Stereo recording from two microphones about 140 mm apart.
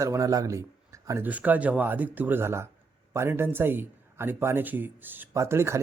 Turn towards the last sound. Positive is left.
turn(degrees=-20)  # may be behind; listen again after turning